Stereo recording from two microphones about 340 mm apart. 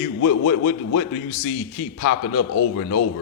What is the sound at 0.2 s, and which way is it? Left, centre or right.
A man's voice, left.